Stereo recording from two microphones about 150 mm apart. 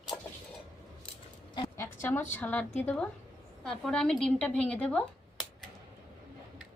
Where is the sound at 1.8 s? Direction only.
15° left (ahead or behind).